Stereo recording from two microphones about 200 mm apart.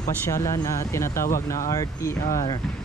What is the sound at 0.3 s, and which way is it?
Speech, 15° left (ahead or behind).